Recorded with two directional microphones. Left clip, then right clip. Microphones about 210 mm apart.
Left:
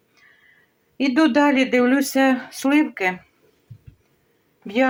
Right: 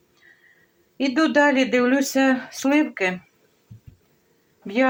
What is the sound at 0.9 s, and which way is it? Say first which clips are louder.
Speech: left 1 dB; 10° left (ahead or behind).